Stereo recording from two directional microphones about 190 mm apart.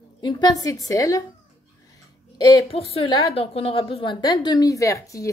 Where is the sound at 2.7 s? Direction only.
30° left (ahead or behind); by 5.3 s 15° left (ahead or behind).